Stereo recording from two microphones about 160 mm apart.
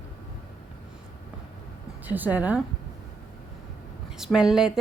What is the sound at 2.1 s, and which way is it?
Speech, 10° right (ahead or behind).